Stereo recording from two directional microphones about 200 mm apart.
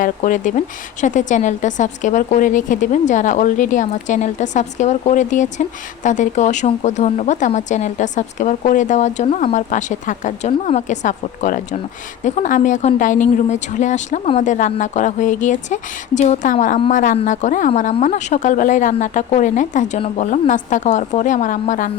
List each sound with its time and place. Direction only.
0.0 s a woman's voice: 40° left (ahead or behind)